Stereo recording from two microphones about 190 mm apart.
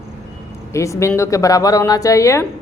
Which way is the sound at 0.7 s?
15° left (ahead or behind).